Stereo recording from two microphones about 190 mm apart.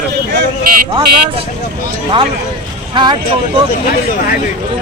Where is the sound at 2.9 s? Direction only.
25° right (ahead or behind).